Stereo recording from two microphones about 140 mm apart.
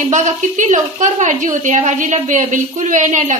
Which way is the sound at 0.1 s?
60° right (ahead or behind).